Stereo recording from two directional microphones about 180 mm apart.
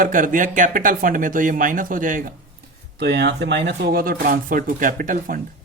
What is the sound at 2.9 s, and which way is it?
Speech, 70° right (ahead or behind).